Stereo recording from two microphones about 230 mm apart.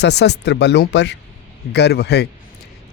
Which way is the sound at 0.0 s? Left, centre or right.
Left.